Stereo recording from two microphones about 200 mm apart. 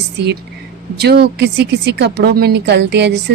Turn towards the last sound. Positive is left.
turn(degrees=-60)  # may be behind; listen again after turning